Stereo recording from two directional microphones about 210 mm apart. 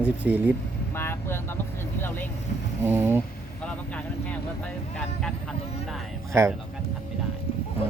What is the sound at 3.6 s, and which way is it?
Vehicle, 5° left (ahead or behind).